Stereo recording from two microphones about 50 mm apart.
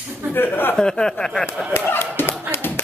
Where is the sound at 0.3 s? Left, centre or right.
Left.